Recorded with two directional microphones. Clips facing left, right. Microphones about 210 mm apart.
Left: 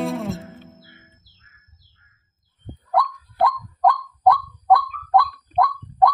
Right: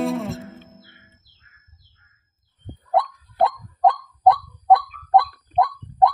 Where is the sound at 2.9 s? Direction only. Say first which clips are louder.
Right 1 dB; 25° right (ahead or behind).